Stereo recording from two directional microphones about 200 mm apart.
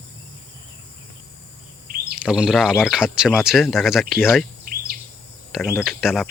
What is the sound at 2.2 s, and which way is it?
Speech, 5° right (ahead or behind).